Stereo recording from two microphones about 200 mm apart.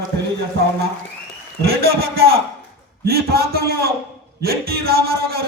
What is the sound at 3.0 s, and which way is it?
A man's voice, 50° right (ahead or behind).